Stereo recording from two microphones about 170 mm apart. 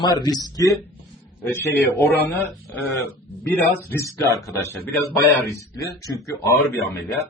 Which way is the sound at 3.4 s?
10° left (ahead or behind).